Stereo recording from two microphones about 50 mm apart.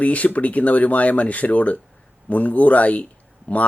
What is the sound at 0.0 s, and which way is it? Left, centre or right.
Speech, left.